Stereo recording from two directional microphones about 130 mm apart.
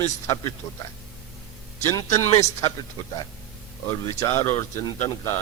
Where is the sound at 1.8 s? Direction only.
20° left (ahead or behind).